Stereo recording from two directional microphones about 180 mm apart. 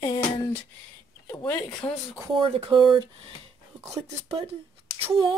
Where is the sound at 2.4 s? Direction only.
30° right (ahead or behind).